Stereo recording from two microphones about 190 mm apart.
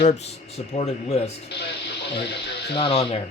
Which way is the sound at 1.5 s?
60° left (ahead or behind).